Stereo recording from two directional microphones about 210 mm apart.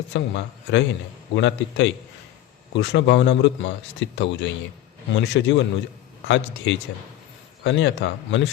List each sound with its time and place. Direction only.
0.1 s speech: 60° left (ahead or behind)